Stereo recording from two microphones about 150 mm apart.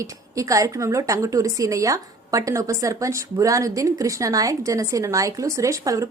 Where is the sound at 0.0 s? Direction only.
20° right (ahead or behind).